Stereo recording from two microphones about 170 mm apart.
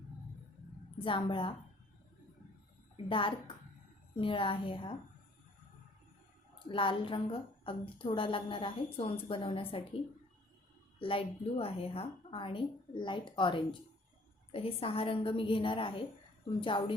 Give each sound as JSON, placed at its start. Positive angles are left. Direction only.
{"t": 0.9, "sound": "a woman's voice", "side_deg": 30}
{"t": 2.9, "sound": "a woman's voice", "side_deg": 30}
{"t": 6.7, "sound": "a woman's voice", "side_deg": 30}
{"t": 11.0, "sound": "a woman's voice", "side_deg": 30}